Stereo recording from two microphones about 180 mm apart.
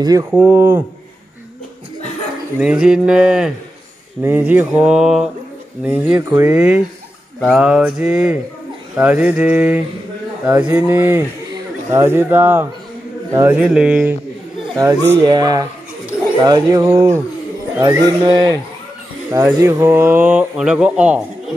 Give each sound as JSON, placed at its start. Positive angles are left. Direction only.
{"t": 0.0, "sound": "speech", "side_deg": -20}
{"t": 0.3, "sound": "speech", "side_deg": -10}
{"t": 2.6, "sound": "a sound", "side_deg": -5}
{"t": 4.2, "sound": "speech", "side_deg": -10}
{"t": 14.8, "sound": "speech", "side_deg": -20}